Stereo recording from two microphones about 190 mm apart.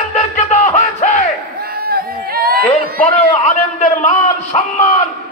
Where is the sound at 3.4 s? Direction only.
40° left (ahead or behind).